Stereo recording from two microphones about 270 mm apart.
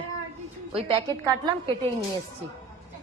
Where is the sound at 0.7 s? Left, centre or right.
Centre.